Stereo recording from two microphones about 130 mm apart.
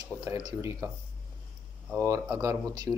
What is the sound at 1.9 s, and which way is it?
Speech, 20° right (ahead or behind).